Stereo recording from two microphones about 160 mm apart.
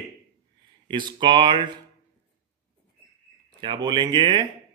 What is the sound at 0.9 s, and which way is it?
Speech, 30° right (ahead or behind).